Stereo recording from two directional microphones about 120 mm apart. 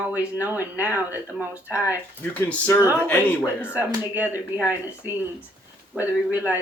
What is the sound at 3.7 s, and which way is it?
Speech, 15° right (ahead or behind).